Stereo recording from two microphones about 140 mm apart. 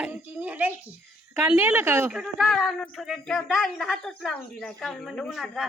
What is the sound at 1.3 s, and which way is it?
Speech, 10° right (ahead or behind).